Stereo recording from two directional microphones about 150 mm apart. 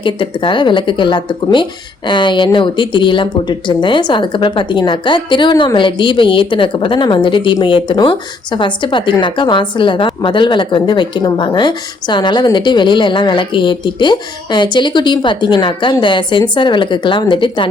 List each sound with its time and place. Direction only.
0.0 s speech: 35° left (ahead or behind)